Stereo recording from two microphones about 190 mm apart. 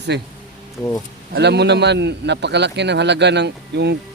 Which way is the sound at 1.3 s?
60° right (ahead or behind).